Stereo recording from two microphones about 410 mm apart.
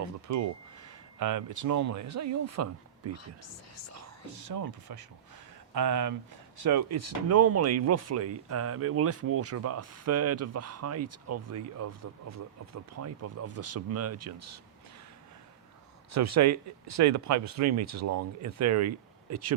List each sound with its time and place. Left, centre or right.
0.0 s a sound: right
1.2 s speech: right
4.3 s speech: right
16.1 s speech: right